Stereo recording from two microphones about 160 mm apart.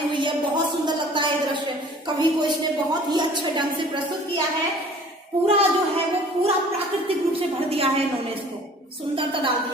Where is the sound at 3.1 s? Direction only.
30° right (ahead or behind).